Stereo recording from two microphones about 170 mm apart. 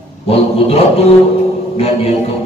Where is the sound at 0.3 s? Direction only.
35° left (ahead or behind).